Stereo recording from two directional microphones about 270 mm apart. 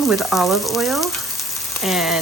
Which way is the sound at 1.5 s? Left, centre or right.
Centre.